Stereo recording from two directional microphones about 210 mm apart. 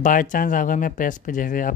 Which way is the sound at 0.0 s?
40° left (ahead or behind).